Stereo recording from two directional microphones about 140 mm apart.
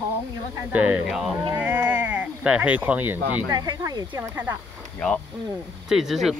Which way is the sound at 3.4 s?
30° right (ahead or behind).